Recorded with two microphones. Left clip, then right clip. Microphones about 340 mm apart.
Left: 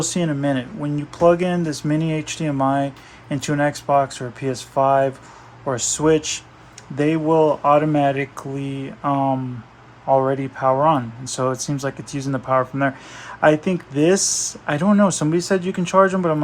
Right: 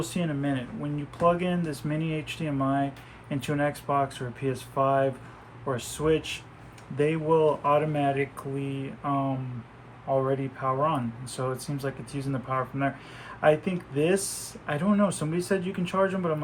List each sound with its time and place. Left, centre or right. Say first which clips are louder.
0.0 s speech: left 9 dB; centre
10.2 s speech: left 8 dB; centre